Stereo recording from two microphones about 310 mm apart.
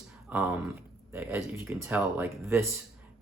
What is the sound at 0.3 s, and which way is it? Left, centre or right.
Speech, centre.